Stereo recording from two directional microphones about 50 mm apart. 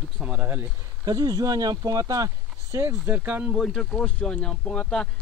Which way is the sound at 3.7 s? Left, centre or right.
Centre.